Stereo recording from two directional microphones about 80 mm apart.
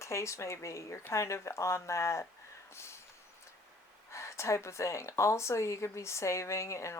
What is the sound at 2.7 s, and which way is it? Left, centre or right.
Vehicle, left.